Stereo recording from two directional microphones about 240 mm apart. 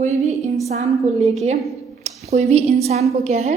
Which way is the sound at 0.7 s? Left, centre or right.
Right.